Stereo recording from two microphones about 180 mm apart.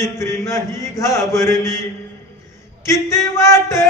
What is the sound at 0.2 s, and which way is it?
A man's voice, 15° left (ahead or behind).